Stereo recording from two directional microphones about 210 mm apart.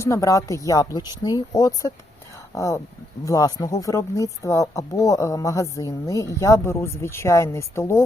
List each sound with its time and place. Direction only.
0.0 s speech: 15° left (ahead or behind)